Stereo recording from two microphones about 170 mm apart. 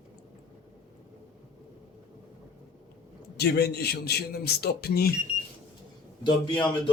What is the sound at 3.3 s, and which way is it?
A man's voice, 70° left (ahead or behind).